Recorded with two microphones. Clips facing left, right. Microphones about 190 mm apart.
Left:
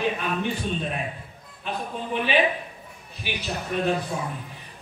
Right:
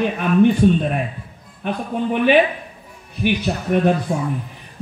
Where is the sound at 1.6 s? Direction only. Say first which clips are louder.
Right 9 dB; 55° right (ahead or behind).